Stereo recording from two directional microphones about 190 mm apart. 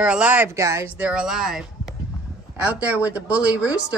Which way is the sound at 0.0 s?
5° right (ahead or behind).